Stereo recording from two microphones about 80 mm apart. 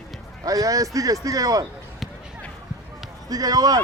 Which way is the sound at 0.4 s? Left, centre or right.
Right.